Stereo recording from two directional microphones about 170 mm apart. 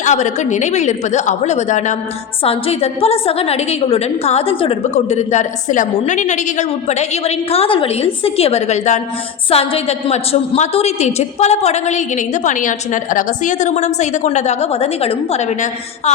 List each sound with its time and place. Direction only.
0.0 s a woman's voice: 45° left (ahead or behind)